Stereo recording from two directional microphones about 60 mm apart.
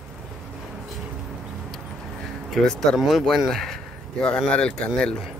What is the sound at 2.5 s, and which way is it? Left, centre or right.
Speech, centre.